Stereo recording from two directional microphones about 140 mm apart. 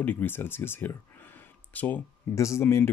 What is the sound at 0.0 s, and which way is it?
Speech, 15° left (ahead or behind).